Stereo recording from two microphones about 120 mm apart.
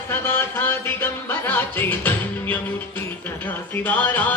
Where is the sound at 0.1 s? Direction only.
20° left (ahead or behind).